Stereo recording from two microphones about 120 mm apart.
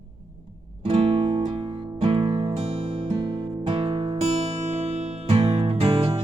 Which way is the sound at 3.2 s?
45° right (ahead or behind).